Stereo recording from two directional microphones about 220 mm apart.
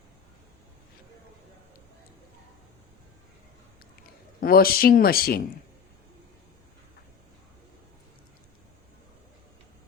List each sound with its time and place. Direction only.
4.4 s speech: 40° left (ahead or behind)